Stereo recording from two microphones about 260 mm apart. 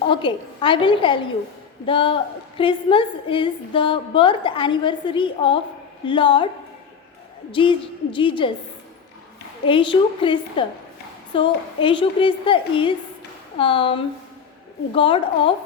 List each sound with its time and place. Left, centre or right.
0.1 s a woman's voice: centre
7.5 s a woman's voice: centre
9.6 s a woman's voice: centre